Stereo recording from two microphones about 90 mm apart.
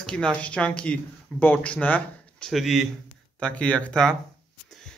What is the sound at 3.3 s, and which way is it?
Speech, 10° left (ahead or behind).